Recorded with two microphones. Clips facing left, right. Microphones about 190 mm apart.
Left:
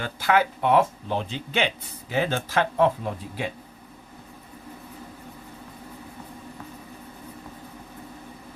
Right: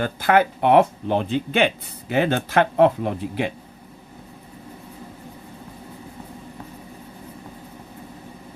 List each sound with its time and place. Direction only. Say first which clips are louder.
0.0 s speech: right 4 dB; 55° right (ahead or behind)